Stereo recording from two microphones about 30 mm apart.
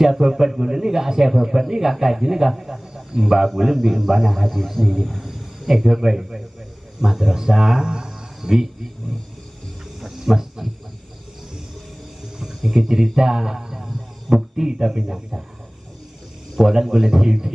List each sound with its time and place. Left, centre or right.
0.0 s a man's voice: centre
4.5 s a man's voice: centre; by 8.1 s right
8.4 s speech: centre
10.0 s a sound: centre
12.6 s a man's voice: centre
16.5 s a man's voice: centre